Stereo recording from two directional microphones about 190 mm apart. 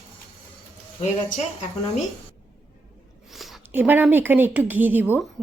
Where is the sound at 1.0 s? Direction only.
35° left (ahead or behind).